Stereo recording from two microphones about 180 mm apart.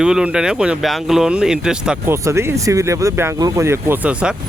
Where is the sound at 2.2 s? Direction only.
15° right (ahead or behind).